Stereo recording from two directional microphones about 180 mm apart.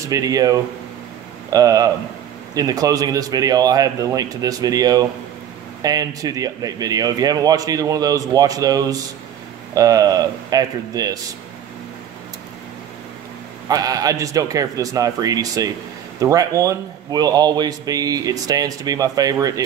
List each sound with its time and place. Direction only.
0.1 s speech: 20° right (ahead or behind)
13.7 s speech: 20° right (ahead or behind)